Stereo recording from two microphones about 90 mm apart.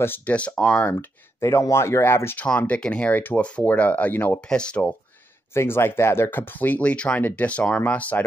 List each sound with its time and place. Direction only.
0.0 s speech: 20° left (ahead or behind)
0.9 s speech: 35° left (ahead or behind)
2.4 s speech: 15° left (ahead or behind)
5.5 s speech: 25° left (ahead or behind)